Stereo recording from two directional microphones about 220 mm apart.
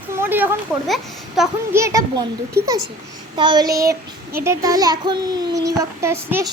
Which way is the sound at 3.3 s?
20° right (ahead or behind).